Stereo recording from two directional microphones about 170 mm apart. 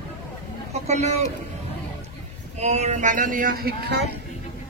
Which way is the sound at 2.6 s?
40° right (ahead or behind).